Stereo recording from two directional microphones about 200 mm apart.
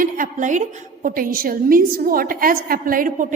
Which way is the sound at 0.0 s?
40° right (ahead or behind).